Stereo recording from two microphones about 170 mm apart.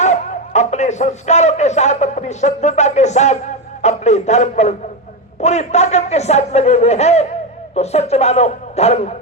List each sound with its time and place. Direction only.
0.0 s a man's voice: 45° left (ahead or behind)